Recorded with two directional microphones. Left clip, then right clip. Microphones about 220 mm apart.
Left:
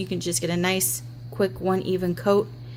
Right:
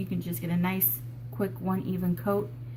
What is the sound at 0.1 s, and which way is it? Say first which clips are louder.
A woman's voice: left 9 dB; 45° left (ahead or behind).